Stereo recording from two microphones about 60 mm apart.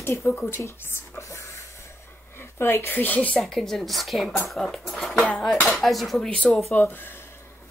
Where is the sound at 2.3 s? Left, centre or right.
Left.